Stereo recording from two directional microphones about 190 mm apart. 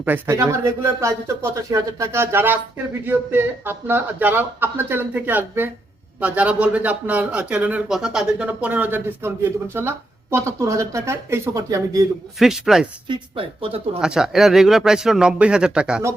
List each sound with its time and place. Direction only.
0.0 s speech: 10° right (ahead or behind)
12.4 s a man's voice: centre (ahead or behind)
13.1 s speech: 30° right (ahead or behind)
14.0 s a man's voice: 5° right (ahead or behind)